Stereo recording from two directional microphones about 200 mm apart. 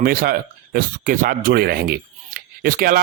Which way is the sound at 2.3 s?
45° right (ahead or behind).